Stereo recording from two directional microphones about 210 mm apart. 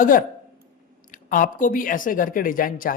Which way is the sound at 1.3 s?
40° left (ahead or behind).